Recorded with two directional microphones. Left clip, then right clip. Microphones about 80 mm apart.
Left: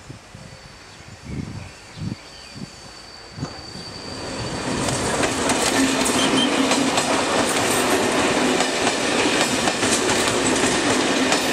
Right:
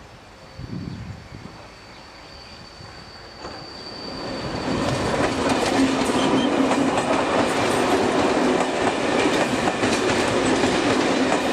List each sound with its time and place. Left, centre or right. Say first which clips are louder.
4.2 s train: even; left